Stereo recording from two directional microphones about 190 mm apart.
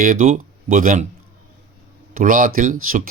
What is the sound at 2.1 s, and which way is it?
Speech, 45° right (ahead or behind).